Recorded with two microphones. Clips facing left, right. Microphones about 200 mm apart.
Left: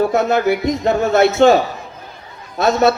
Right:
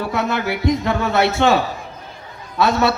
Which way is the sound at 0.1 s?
50° left (ahead or behind).